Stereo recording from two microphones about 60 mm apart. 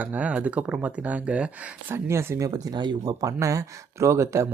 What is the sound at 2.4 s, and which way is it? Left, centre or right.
Speech, right.